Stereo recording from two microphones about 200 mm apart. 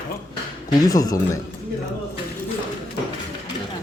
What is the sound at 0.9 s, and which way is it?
Speech, 20° left (ahead or behind).